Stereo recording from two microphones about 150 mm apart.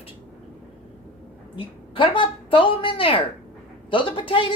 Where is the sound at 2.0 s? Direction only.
35° left (ahead or behind).